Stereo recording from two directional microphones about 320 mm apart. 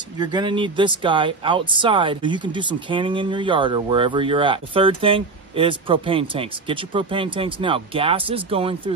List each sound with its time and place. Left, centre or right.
0.2 s speech: centre